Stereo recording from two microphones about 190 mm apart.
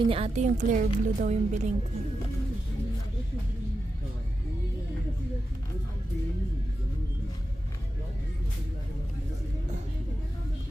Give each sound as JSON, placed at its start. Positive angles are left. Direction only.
{"t": 0.1, "sound": "a woman's voice", "side_deg": -35}